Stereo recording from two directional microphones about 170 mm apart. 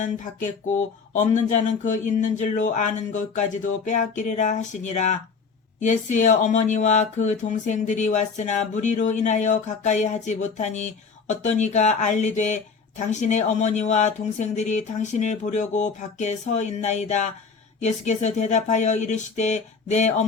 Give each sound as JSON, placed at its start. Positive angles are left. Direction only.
{"t": 1.1, "sound": "speech", "side_deg": 45}